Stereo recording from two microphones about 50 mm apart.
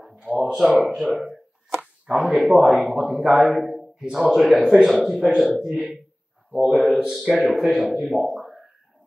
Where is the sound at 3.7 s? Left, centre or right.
Centre.